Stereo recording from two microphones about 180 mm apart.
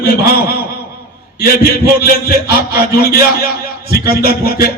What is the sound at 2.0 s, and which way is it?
A man's voice, 60° left (ahead or behind).